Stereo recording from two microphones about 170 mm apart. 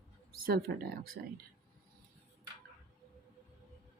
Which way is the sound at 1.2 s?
60° right (ahead or behind).